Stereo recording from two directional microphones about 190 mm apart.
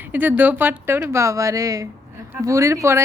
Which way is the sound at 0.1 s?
10° right (ahead or behind).